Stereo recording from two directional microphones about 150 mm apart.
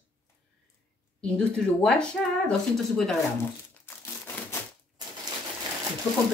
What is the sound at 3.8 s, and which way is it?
Crumpling, 15° left (ahead or behind).